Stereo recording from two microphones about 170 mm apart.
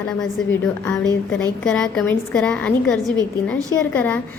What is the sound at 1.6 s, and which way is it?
A woman's voice, 5° left (ahead or behind).